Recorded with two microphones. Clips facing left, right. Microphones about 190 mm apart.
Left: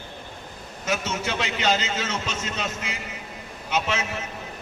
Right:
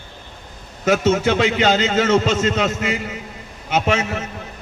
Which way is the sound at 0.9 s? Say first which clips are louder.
Right 11 dB; 50° right (ahead or behind).